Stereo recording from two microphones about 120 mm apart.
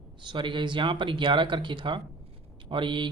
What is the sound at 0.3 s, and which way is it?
Speech, 40° right (ahead or behind).